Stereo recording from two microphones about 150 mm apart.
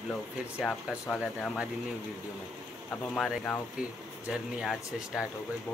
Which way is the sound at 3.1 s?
5° left (ahead or behind).